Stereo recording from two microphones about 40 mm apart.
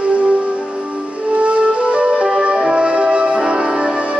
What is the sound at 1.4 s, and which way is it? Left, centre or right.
Music, right.